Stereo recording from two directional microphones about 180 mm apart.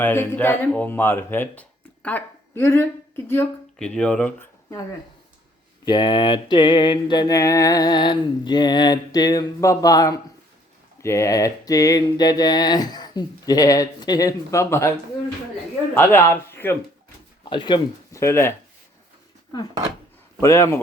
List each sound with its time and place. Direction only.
0.0 s speech: 10° left (ahead or behind)
5.8 s mantra: 25° left (ahead or behind)
16.0 s speech: 15° left (ahead or behind)
17.4 s speech: 25° left (ahead or behind)
20.4 s speech: 15° left (ahead or behind)